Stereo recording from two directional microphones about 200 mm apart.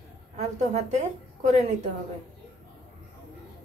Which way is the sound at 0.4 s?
35° right (ahead or behind).